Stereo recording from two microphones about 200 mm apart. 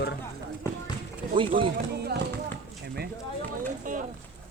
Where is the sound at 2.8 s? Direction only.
55° right (ahead or behind).